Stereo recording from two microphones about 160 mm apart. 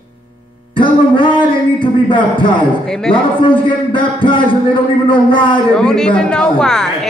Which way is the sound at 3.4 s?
30° left (ahead or behind).